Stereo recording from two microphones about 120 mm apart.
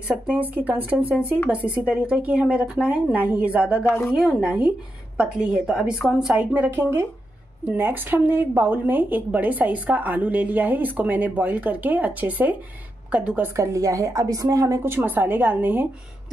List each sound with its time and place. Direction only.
0.6 s a woman's voice: 15° right (ahead or behind)
13.6 s a woman's voice: 25° right (ahead or behind)